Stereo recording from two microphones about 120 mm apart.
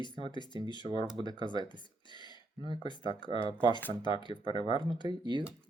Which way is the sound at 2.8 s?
40° left (ahead or behind).